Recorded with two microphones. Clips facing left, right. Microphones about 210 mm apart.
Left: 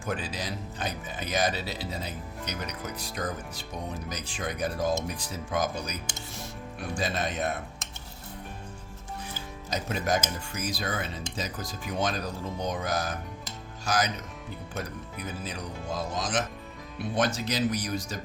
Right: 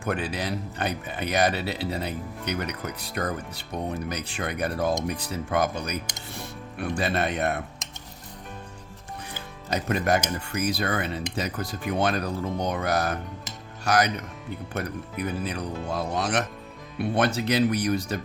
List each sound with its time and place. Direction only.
0.0 s speech: 65° right (ahead or behind)
9.6 s speech: 60° right (ahead or behind)